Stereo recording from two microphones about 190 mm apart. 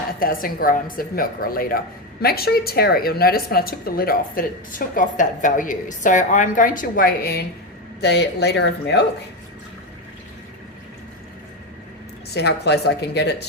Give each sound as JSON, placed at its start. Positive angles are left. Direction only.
{"t": 0.2, "sound": "a woman's voice", "side_deg": 50}
{"t": 12.3, "sound": "speech", "side_deg": 60}